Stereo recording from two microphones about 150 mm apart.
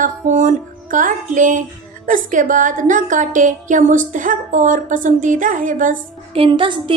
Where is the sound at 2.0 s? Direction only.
60° right (ahead or behind).